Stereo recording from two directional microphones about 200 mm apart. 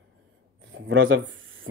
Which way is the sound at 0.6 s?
70° right (ahead or behind).